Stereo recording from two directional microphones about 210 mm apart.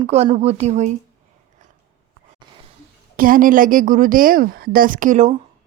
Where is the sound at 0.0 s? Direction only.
25° right (ahead or behind).